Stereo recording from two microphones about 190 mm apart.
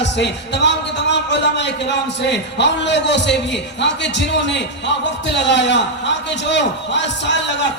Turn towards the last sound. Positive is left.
turn(degrees=70)  # may be behind; listen again after turning